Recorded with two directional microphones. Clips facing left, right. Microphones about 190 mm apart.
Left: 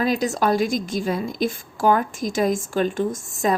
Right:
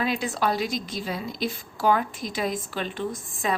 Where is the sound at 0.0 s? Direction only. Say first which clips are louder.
Left 5 dB; 40° left (ahead or behind).